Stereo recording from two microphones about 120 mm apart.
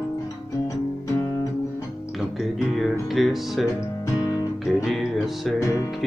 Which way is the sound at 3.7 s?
25° left (ahead or behind).